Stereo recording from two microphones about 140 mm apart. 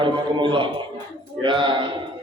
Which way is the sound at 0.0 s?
35° right (ahead or behind).